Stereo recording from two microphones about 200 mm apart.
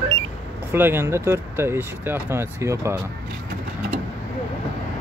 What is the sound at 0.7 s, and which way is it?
Speech, 10° right (ahead or behind).